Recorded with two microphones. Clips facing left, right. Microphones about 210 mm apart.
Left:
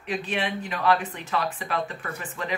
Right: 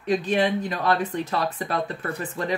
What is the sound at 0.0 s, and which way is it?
Speech, 35° right (ahead or behind).